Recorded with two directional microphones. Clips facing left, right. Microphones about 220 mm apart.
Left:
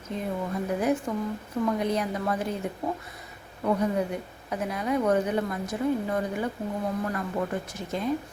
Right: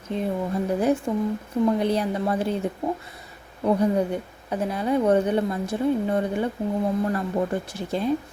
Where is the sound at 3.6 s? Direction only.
30° right (ahead or behind).